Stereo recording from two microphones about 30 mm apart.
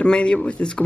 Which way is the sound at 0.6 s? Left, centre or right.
Left.